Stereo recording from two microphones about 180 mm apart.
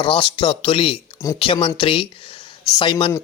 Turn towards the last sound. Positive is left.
turn(degrees=25)  # may be behind; listen again after turning